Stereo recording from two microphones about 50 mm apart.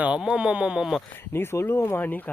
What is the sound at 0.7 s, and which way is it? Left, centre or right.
Speech, centre.